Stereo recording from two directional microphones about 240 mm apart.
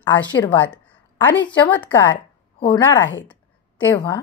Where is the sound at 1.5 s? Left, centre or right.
Centre.